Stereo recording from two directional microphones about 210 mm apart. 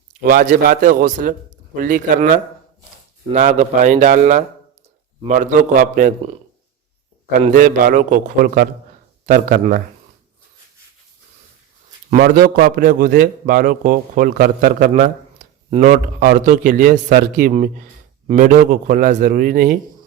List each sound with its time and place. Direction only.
0.2 s a man's voice: 45° right (ahead or behind)
7.4 s a man's voice: 35° right (ahead or behind)
12.1 s a man's voice: 45° right (ahead or behind)